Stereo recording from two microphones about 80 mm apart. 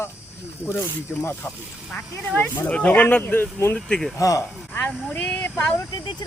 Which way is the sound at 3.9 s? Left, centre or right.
Centre.